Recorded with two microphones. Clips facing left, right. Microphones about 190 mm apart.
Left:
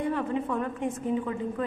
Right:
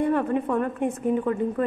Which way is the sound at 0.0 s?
60° right (ahead or behind).